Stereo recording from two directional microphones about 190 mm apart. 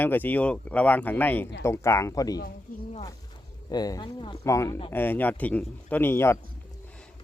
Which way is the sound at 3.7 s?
20° left (ahead or behind).